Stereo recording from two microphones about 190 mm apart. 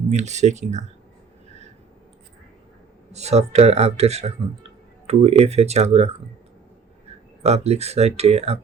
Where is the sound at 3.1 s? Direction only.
35° right (ahead or behind).